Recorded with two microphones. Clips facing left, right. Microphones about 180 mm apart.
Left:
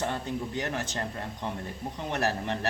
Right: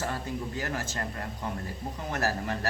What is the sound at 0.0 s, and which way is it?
A man's voice, 25° left (ahead or behind).